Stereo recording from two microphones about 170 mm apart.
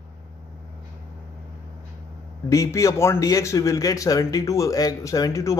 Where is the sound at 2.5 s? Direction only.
20° left (ahead or behind).